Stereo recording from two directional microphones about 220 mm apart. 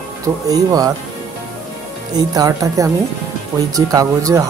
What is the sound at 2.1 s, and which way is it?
Speech, 15° right (ahead or behind).